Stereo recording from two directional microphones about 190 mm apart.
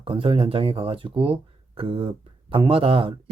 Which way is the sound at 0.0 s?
30° right (ahead or behind).